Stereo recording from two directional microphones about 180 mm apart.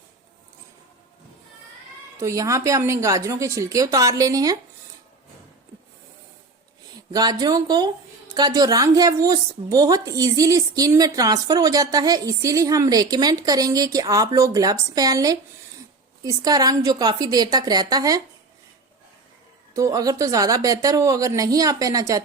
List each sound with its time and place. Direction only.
2.1 s a woman's voice: 15° right (ahead or behind)
7.1 s a woman's voice: 20° right (ahead or behind)
19.7 s a woman's voice: 20° right (ahead or behind)